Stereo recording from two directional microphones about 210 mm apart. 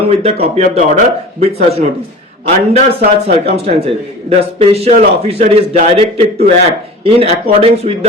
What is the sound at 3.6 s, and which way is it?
A man's voice, 30° right (ahead or behind).